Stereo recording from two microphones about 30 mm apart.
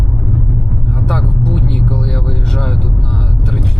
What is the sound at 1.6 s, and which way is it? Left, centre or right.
Vehicle, centre.